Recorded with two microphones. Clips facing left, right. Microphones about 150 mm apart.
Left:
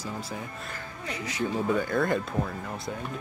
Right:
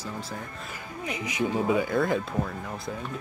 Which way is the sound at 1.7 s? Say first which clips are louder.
Even; 5° right (ahead or behind).